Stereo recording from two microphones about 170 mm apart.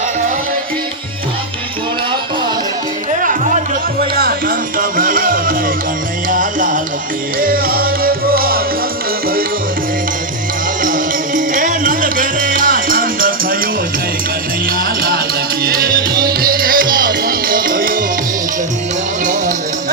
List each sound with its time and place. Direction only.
4.1 s music: 65° right (ahead or behind)
10.8 s music: 50° right (ahead or behind)
14.7 s music: 65° right (ahead or behind)
19.2 s music: 50° right (ahead or behind)